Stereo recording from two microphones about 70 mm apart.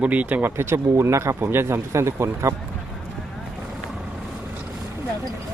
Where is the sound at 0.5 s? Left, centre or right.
Right.